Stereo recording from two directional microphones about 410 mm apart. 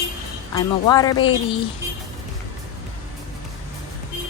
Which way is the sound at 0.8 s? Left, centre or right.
Centre.